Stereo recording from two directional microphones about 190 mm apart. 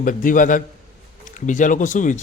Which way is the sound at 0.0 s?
45° left (ahead or behind).